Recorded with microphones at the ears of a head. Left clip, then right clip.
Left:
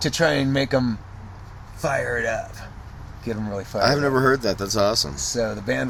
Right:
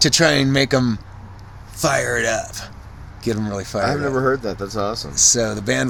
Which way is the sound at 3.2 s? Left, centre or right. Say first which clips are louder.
Right 5 dB; right.